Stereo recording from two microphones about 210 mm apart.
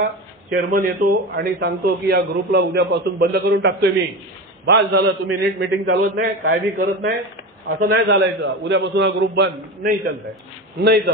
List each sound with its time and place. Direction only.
0.0 s a man's voice: 45° right (ahead or behind)